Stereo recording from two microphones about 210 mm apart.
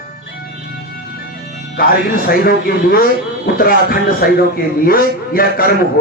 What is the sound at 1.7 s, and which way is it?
A man's voice, 45° left (ahead or behind).